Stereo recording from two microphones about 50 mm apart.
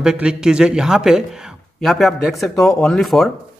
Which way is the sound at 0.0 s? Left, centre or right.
Centre.